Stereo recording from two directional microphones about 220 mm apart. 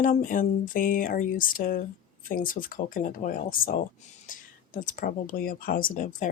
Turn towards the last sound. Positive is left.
turn(degrees=35)  # may be behind; listen again after turning